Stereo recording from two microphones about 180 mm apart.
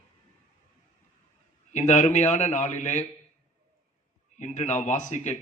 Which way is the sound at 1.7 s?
40° left (ahead or behind).